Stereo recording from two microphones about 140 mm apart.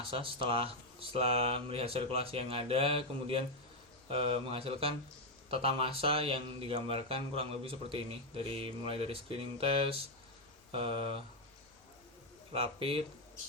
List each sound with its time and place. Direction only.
0.1 s speech: 40° right (ahead or behind)
12.5 s speech: 40° right (ahead or behind)